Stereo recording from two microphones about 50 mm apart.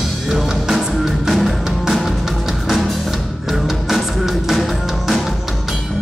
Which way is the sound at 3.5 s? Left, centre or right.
Centre.